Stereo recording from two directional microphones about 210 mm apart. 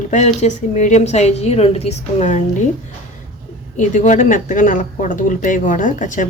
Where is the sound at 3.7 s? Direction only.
35° left (ahead or behind).